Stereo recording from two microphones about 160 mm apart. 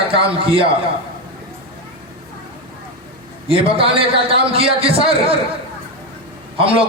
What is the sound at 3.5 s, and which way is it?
A man's voice, 35° right (ahead or behind).